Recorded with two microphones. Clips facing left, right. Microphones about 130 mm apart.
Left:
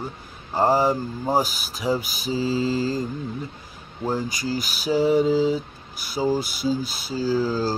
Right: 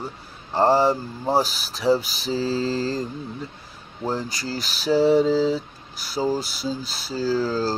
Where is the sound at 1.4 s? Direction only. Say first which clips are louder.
Right 4 dB; 45° left (ahead or behind).